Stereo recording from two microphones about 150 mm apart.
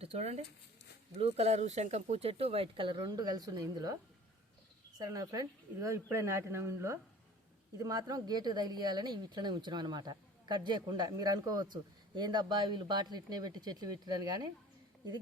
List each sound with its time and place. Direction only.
0.0 s speech: 45° right (ahead or behind); by 3.9 s 25° right (ahead or behind)
4.9 s speech: 25° right (ahead or behind)